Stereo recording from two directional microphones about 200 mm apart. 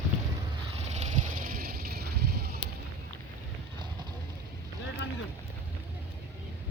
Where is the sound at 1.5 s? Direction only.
50° right (ahead or behind).